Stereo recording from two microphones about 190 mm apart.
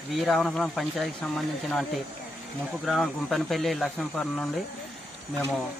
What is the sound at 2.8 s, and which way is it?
Speech, centre (ahead or behind).